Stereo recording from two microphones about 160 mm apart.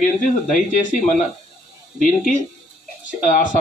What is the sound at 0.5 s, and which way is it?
Speech, 50° left (ahead or behind).